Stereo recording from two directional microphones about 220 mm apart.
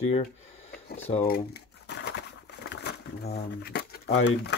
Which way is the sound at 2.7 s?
50° left (ahead or behind).